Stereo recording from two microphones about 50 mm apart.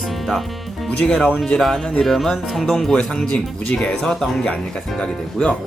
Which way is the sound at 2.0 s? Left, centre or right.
Centre.